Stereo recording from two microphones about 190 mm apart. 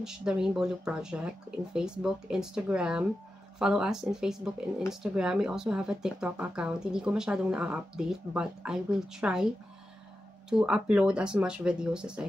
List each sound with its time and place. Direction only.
0.0 s speech: 5° right (ahead or behind)
10.5 s speech: 5° right (ahead or behind)